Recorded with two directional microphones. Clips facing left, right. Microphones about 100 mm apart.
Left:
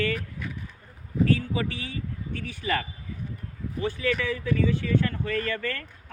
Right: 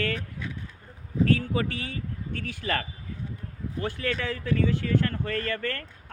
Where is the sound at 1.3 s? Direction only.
55° right (ahead or behind).